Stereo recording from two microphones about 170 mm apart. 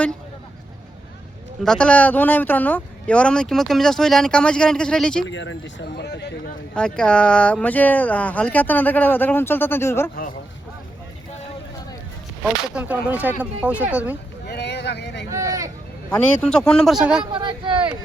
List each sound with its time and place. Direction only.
1.6 s speech: 5° left (ahead or behind)
5.3 s speech: 90° left
6.7 s speech: 5° left (ahead or behind)
12.7 s speech: 10° right (ahead or behind)
14.4 s speech: 75° left (ahead or behind)
15.3 s speech: 20° right (ahead or behind)
16.0 s speech: 5° left (ahead or behind)
17.3 s speech: 30° right (ahead or behind)